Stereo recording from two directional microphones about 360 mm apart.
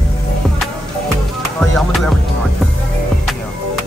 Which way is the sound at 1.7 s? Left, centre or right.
Centre.